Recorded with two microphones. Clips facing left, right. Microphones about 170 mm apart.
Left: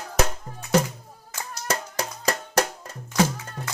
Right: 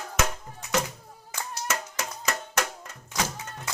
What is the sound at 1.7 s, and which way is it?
Music, 35° left (ahead or behind).